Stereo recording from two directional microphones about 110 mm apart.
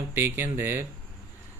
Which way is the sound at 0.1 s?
20° right (ahead or behind).